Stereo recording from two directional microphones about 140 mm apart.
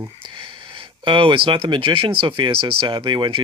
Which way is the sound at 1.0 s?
35° right (ahead or behind).